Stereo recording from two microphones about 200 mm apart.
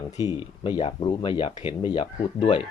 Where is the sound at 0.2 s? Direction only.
25° left (ahead or behind).